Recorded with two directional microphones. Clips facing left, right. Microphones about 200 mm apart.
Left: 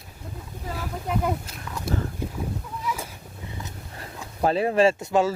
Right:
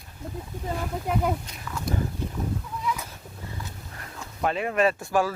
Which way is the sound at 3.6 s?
20° left (ahead or behind).